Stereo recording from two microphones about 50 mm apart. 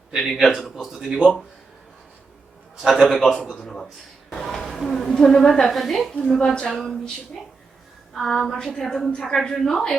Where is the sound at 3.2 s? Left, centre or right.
Centre.